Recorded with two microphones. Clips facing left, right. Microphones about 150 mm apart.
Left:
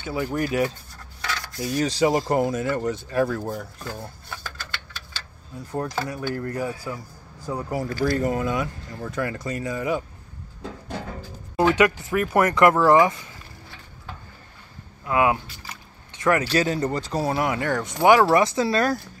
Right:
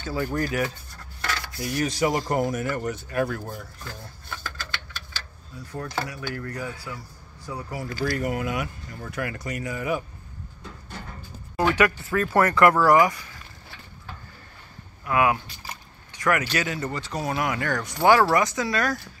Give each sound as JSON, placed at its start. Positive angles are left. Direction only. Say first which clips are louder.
{"t": 0.0, "sound": "speech", "louder": "left 1 dB", "side_deg": 15}
{"t": 5.7, "sound": "speech", "louder": "left 4 dB", "side_deg": 35}
{"t": 7.4, "sound": "speech", "louder": "left 6 dB", "side_deg": 45}
{"t": 8.1, "sound": "speech", "louder": "left 3 dB", "side_deg": 30}
{"t": 10.6, "sound": "music", "louder": "left 8 dB", "side_deg": 90}
{"t": 11.5, "sound": "speech", "louder": "left 3 dB", "side_deg": 20}
{"t": 15.0, "sound": "speech", "louder": "left 1 dB", "side_deg": 25}
{"t": 16.1, "sound": "vehicle", "louder": "left 3 dB", "side_deg": 25}
{"t": 16.5, "sound": "speech", "louder": "left 6 dB", "side_deg": 35}
{"t": 18.3, "sound": "speech", "louder": "left 4 dB", "side_deg": 30}